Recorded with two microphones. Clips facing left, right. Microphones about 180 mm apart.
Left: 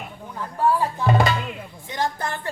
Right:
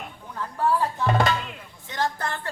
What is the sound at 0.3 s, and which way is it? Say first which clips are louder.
Music: left 2 dB; 10° left (ahead or behind).